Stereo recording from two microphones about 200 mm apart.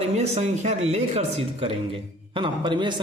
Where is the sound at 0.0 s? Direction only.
35° right (ahead or behind).